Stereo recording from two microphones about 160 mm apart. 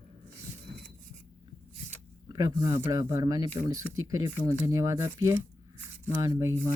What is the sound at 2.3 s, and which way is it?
Speech, 25° right (ahead or behind).